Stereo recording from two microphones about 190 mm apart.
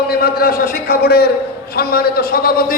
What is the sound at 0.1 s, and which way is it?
A man's voice, 55° left (ahead or behind).